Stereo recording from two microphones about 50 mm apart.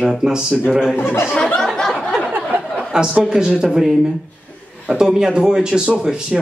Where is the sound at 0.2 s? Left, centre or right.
Centre.